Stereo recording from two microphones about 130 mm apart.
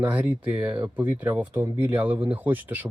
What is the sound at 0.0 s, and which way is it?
Speech, 10° right (ahead or behind).